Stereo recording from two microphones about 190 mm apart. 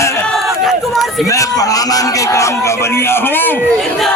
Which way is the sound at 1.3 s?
15° left (ahead or behind).